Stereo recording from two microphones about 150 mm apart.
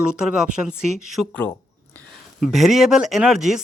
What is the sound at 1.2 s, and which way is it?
Speech, 10° left (ahead or behind).